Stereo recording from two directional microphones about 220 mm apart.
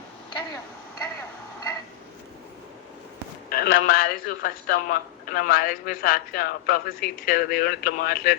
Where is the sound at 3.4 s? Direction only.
45° left (ahead or behind).